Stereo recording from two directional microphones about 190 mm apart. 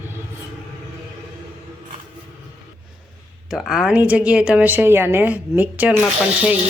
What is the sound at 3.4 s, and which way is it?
A woman's voice, centre (ahead or behind).